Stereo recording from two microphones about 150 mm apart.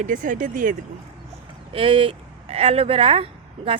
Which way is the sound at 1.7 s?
40° right (ahead or behind).